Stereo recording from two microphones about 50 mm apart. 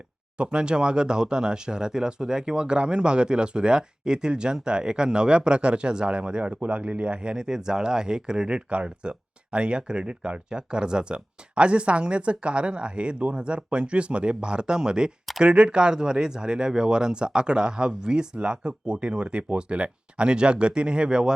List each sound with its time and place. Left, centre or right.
0.3 s speech: centre